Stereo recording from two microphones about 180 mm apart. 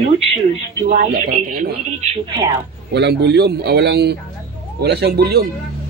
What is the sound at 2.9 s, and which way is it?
A man's voice, 70° right (ahead or behind).